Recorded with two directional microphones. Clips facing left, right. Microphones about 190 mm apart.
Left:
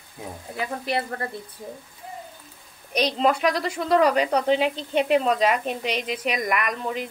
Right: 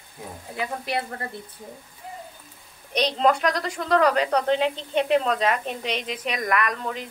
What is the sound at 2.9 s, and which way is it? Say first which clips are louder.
Speech: even; 10° left (ahead or behind).